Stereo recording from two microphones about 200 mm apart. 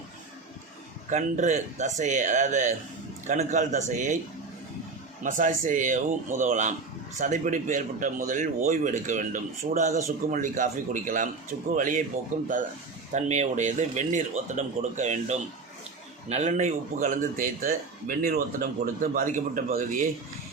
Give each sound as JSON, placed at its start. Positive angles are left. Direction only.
{"t": 1.1, "sound": "speech", "side_deg": -35}
{"t": 5.2, "sound": "speech", "side_deg": -40}